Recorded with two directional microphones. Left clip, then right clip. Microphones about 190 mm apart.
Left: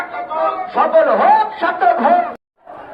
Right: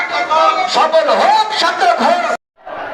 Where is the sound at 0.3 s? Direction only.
10° right (ahead or behind).